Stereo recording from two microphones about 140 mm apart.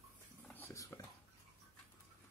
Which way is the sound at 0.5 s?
15° left (ahead or behind).